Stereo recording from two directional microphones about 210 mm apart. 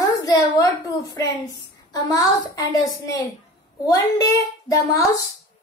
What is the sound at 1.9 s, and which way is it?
A child's voice, 15° left (ahead or behind).